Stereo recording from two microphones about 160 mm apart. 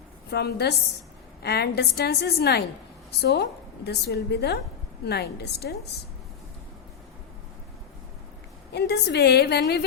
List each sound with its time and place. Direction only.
0.3 s a woman's voice: 90° left
8.7 s a woman's voice: 90° left